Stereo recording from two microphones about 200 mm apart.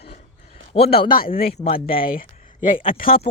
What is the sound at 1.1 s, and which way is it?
Speech, 45° left (ahead or behind).